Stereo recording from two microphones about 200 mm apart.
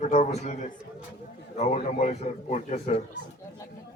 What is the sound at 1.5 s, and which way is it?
A man's voice, 35° left (ahead or behind).